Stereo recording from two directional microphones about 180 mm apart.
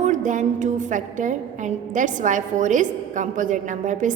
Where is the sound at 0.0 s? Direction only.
45° right (ahead or behind).